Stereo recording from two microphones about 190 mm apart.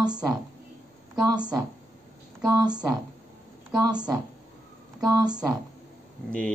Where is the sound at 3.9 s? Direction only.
20° right (ahead or behind).